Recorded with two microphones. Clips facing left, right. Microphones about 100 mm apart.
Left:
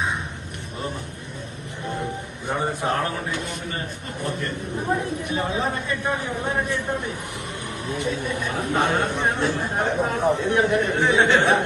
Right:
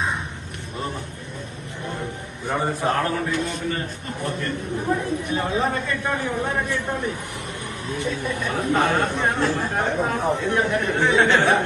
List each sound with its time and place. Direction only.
2.5 s a man's voice: 15° left (ahead or behind)